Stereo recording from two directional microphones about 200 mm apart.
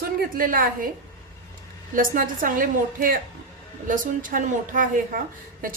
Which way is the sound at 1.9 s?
45° right (ahead or behind).